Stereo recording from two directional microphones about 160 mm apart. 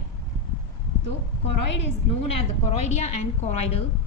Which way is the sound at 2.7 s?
45° left (ahead or behind).